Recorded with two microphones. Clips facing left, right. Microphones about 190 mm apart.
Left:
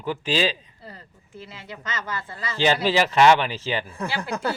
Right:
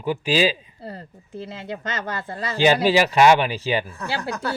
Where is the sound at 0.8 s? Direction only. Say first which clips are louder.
Right 8 dB; 45° right (ahead or behind).